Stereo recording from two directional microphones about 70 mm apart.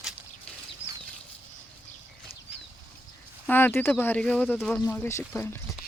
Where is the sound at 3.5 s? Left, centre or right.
Left.